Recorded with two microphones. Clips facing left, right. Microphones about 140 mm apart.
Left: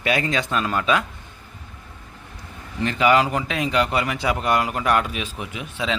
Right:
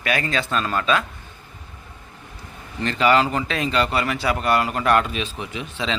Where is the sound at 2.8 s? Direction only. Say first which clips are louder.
Even; 10° left (ahead or behind).